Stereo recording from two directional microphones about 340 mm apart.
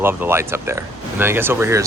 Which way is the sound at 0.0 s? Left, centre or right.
Centre.